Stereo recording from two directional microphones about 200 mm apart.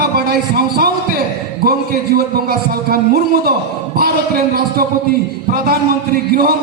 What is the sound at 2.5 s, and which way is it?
A man's voice, 50° right (ahead or behind).